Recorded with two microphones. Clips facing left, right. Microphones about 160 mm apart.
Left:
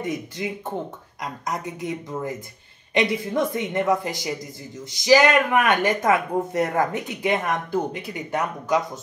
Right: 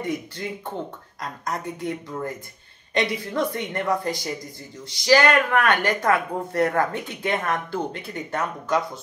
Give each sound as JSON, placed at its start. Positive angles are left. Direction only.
{"t": 0.0, "sound": "speech", "side_deg": 15}
{"t": 5.0, "sound": "speech", "side_deg": 20}